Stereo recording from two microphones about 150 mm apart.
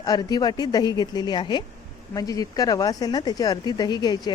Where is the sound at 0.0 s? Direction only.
25° left (ahead or behind).